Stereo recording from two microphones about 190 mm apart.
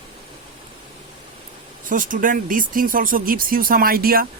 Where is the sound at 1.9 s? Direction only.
45° right (ahead or behind).